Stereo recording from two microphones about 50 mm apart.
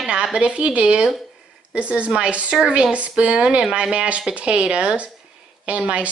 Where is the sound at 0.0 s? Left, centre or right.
Centre.